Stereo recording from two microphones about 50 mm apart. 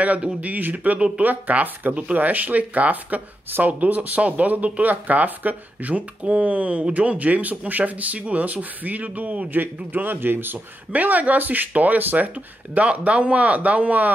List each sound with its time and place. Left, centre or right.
0.0 s speech: right
0.9 s speech: centre
1.2 s speech: right
9.5 s speech: right